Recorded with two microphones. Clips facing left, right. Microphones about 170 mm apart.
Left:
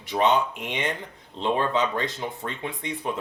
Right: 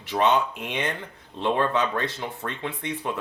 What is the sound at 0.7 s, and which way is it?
Speech, 20° left (ahead or behind).